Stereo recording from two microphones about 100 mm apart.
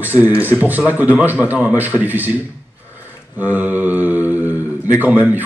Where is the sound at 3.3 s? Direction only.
15° right (ahead or behind).